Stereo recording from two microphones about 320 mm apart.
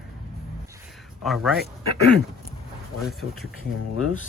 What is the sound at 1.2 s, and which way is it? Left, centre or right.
Speech, centre.